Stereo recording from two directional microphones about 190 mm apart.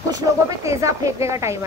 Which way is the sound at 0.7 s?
15° right (ahead or behind).